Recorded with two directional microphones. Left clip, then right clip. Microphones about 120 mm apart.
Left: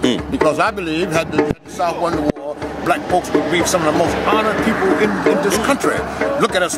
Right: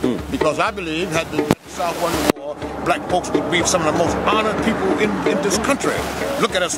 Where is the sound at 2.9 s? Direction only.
5° right (ahead or behind).